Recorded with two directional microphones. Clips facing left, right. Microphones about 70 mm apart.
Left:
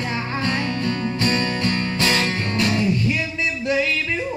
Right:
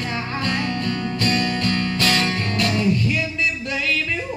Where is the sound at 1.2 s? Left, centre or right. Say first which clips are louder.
Right 1 dB; left.